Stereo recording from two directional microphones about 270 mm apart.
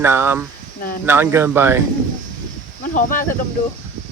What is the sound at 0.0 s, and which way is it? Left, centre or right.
Speech, centre.